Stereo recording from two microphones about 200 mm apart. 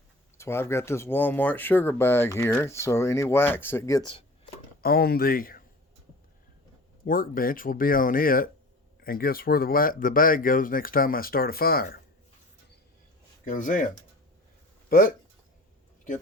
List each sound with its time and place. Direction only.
0.3 s speech: 10° left (ahead or behind)
4.8 s speech: 50° left (ahead or behind)
7.0 s speech: 45° left (ahead or behind)
13.4 s speech: 40° left (ahead or behind)
14.8 s speech: 45° left (ahead or behind)